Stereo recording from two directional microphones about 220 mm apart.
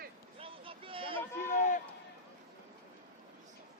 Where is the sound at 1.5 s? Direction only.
35° left (ahead or behind).